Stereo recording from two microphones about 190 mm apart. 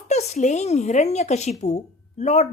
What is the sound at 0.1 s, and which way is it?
Speech, 35° left (ahead or behind).